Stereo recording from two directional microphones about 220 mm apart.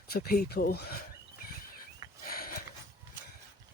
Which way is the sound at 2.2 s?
40° left (ahead or behind).